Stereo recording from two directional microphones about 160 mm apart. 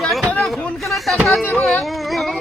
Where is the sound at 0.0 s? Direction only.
Centre (ahead or behind).